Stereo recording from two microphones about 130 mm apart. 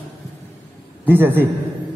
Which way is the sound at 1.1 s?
15° right (ahead or behind).